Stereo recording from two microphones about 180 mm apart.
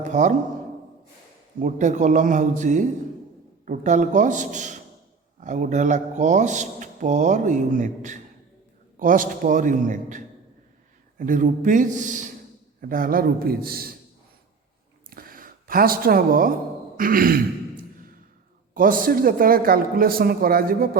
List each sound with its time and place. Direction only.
0.0 s speech: 40° right (ahead or behind)
1.6 s a man's voice: 45° right (ahead or behind)
15.1 s a sound: 55° right (ahead or behind)
17.0 s speech: 50° right (ahead or behind)
18.7 s speech: 50° right (ahead or behind)